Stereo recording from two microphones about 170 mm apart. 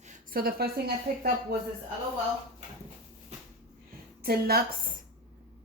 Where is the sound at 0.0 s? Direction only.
50° right (ahead or behind).